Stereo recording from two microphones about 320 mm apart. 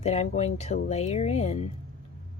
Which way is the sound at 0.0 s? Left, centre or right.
Centre.